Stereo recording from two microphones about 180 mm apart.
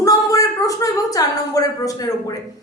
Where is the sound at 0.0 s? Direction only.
20° left (ahead or behind).